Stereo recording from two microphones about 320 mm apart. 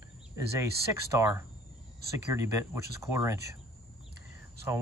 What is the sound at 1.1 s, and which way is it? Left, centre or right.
Speech, centre.